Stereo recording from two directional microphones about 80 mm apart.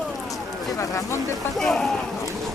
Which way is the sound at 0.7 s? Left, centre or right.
Left.